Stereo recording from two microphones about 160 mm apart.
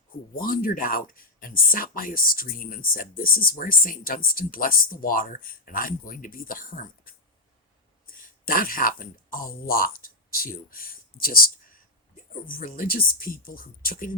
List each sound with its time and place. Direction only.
0.4 s speech: 60° left (ahead or behind)